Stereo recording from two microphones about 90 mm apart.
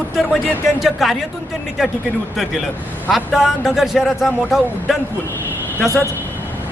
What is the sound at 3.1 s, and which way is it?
Speech, centre (ahead or behind).